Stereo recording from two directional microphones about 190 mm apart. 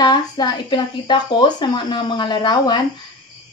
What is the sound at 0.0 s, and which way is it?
Speech, 25° left (ahead or behind).